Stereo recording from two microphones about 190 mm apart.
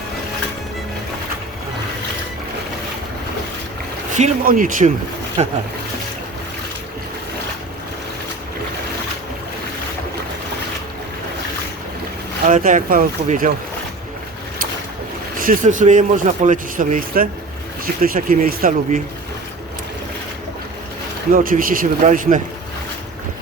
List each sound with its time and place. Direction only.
4.1 s speech: 45° right (ahead or behind)
12.5 s speech: 45° right (ahead or behind)
15.4 s speech: 45° right (ahead or behind)
21.3 s speech: 50° right (ahead or behind)